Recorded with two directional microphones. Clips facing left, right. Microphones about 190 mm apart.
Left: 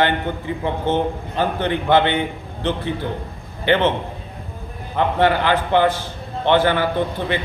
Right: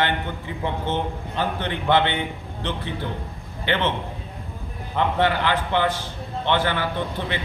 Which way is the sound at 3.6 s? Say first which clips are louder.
Left 6 dB; 45° left (ahead or behind).